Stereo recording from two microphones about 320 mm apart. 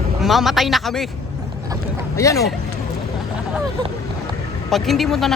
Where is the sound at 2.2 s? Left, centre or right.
Centre.